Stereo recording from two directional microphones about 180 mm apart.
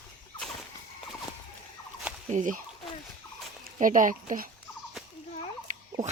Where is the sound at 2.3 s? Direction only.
45° right (ahead or behind).